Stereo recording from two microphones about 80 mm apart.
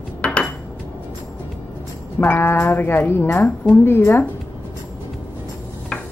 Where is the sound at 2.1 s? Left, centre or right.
Left.